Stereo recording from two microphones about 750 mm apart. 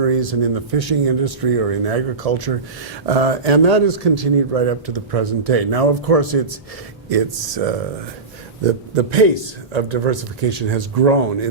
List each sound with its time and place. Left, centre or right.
0.0 s speech: right
9.0 s a man's voice: right